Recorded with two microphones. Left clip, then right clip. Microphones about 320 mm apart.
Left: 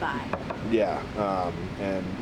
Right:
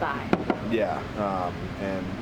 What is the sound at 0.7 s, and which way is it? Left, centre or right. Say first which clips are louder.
Speech: left 4 dB; left.